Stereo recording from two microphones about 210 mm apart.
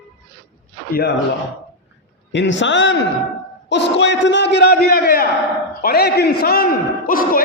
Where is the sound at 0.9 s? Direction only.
50° left (ahead or behind).